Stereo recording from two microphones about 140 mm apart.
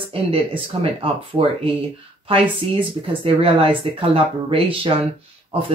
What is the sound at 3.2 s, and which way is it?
Speech, 40° right (ahead or behind).